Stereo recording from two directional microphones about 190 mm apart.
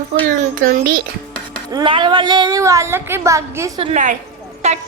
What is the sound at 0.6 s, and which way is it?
Speech, 50° right (ahead or behind).